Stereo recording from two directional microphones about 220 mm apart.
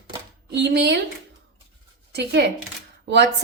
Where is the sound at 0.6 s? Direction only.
50° right (ahead or behind).